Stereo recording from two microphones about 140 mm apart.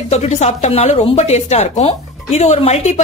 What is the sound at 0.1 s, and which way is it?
A woman's voice, 50° left (ahead or behind).